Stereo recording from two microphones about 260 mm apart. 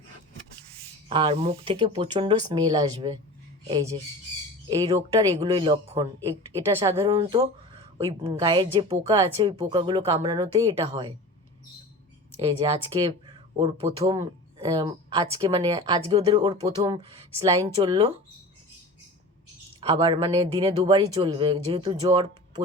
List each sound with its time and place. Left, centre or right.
1.0 s speech: centre
12.4 s speech: centre
19.8 s speech: centre